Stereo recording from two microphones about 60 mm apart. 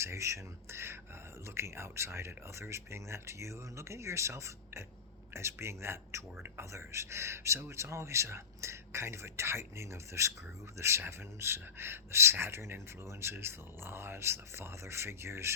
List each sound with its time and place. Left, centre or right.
0.0 s speech: right